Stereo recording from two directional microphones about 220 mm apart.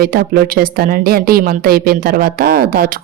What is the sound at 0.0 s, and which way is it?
A woman's voice, 40° right (ahead or behind).